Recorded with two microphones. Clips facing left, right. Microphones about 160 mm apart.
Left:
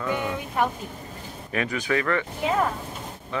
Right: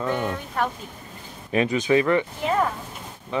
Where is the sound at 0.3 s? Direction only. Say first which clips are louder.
Left 1 dB; 10° left (ahead or behind).